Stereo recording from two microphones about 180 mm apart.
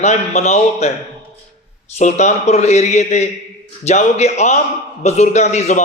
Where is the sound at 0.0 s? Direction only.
40° left (ahead or behind).